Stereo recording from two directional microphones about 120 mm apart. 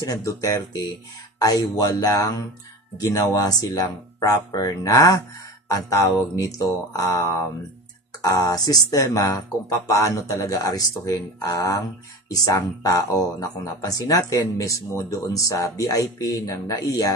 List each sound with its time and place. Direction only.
0.0 s speech: 30° left (ahead or behind)